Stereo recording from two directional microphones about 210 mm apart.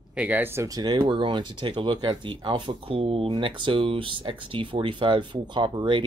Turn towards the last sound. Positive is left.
turn(degrees=-25)  # may be behind; listen again after turning